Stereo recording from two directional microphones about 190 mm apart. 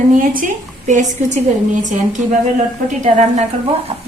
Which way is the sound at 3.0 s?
35° right (ahead or behind).